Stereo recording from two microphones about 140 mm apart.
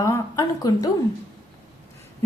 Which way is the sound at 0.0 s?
25° left (ahead or behind).